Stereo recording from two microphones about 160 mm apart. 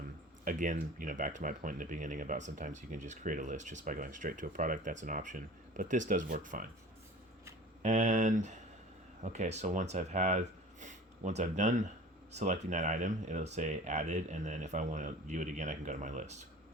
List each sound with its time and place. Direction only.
0.4 s speech: 55° right (ahead or behind)
7.8 s speech: 50° right (ahead or behind)